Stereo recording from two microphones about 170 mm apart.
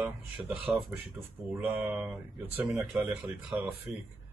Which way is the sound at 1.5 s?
5° right (ahead or behind).